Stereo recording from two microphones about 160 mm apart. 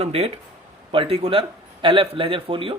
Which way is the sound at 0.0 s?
35° right (ahead or behind).